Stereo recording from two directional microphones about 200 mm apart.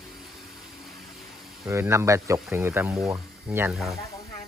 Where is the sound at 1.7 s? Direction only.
15° right (ahead or behind).